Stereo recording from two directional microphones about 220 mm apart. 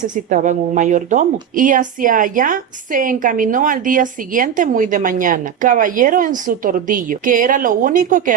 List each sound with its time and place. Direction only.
0.3 s a woman's voice: 35° right (ahead or behind)